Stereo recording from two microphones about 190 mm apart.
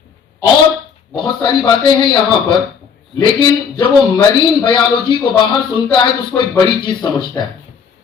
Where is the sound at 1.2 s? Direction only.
25° left (ahead or behind).